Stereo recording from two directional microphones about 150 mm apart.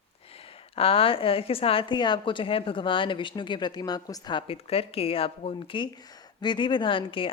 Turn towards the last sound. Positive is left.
turn(degrees=35)  # may be behind; listen again after turning